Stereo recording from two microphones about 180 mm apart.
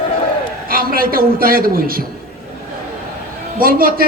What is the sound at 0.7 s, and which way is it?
A man's voice, 55° right (ahead or behind).